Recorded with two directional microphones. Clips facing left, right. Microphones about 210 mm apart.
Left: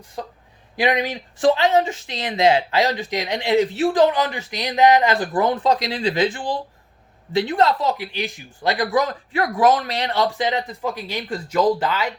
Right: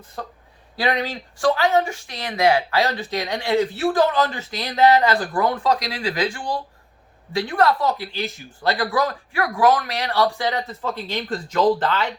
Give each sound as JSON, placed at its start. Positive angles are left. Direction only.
{"t": 0.2, "sound": "speech", "side_deg": 15}